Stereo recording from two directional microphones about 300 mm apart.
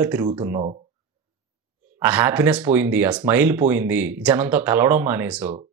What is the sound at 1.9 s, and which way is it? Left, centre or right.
Speech, centre.